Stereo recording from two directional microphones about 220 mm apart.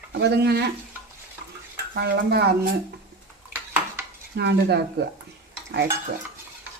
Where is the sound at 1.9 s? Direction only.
45° right (ahead or behind).